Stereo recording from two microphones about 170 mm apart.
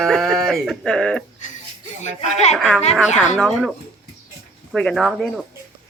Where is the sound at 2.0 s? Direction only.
40° left (ahead or behind).